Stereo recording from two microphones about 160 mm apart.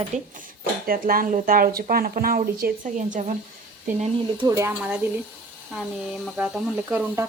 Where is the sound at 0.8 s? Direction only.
65° right (ahead or behind); by 3.4 s 50° right (ahead or behind).